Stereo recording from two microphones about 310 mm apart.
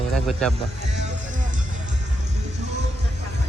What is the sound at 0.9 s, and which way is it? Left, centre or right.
Music, right.